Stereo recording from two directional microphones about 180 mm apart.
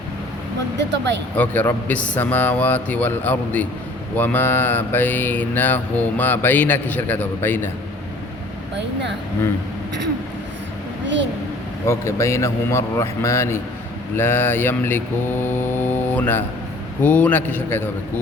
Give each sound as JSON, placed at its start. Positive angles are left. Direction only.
{"t": 1.4, "sound": "mantra", "side_deg": 10}
{"t": 11.9, "sound": "mantra", "side_deg": 15}